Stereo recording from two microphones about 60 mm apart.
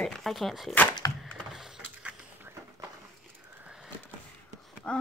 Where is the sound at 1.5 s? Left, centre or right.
Centre.